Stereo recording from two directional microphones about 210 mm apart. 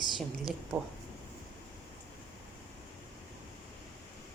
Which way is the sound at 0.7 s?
Centre (ahead or behind).